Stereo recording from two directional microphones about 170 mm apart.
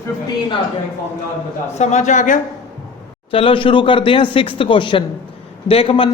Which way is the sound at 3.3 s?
30° left (ahead or behind).